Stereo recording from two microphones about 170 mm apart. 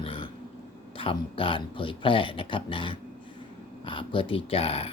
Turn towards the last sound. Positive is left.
turn(degrees=35)  # may be behind; listen again after turning